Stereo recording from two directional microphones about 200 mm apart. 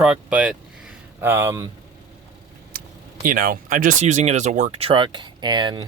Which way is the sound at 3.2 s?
45° right (ahead or behind).